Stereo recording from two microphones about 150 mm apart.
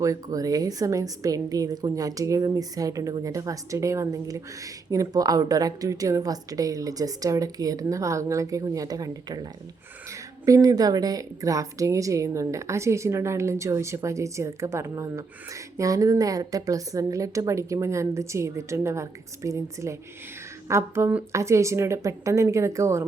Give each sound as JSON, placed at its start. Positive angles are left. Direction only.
{"t": 0.0, "sound": "a woman's voice", "side_deg": -25}